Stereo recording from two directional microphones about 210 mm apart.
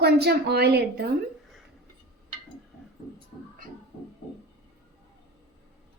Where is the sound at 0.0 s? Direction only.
50° right (ahead or behind).